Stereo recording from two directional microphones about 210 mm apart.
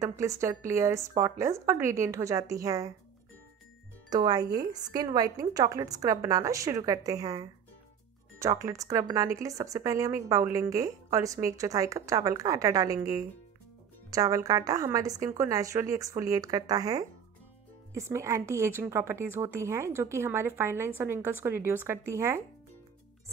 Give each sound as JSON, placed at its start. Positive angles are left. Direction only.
{"t": 0.0, "sound": "speech", "side_deg": -15}
{"t": 4.1, "sound": "speech", "side_deg": -20}